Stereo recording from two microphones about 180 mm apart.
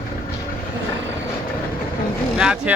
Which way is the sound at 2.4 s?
5° right (ahead or behind).